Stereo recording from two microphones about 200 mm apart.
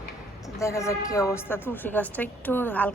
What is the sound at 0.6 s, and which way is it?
A woman's voice, 15° left (ahead or behind).